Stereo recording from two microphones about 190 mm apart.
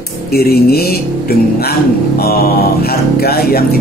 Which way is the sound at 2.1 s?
55° left (ahead or behind).